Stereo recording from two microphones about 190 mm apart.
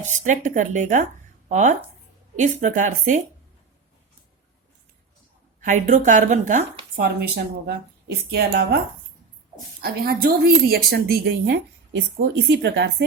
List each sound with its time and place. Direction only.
0.1 s a woman's voice: 40° right (ahead or behind)
5.5 s a woman's voice: 40° right (ahead or behind); by 8.8 s 60° right (ahead or behind)
9.8 s speech: 50° right (ahead or behind)